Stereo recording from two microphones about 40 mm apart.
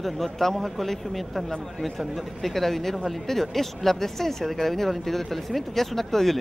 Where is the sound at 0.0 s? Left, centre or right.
Centre.